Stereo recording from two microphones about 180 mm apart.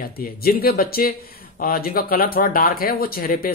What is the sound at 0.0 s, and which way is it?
A man's voice, 55° left (ahead or behind).